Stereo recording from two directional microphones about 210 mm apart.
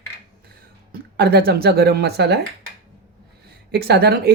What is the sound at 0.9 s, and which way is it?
Speech, 50° right (ahead or behind).